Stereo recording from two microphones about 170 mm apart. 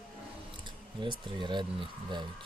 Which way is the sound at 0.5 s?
25° right (ahead or behind).